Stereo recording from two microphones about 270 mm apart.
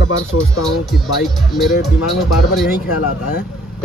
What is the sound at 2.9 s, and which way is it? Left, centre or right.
Speech, left.